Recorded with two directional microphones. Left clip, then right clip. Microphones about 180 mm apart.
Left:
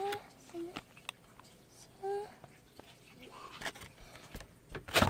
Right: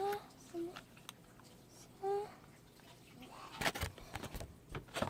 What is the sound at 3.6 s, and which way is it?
Vehicle, 55° right (ahead or behind).